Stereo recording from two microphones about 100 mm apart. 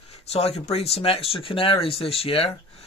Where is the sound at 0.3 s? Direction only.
85° left.